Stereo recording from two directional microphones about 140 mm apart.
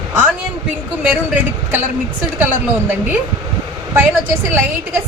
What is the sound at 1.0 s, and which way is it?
Speech, 10° right (ahead or behind).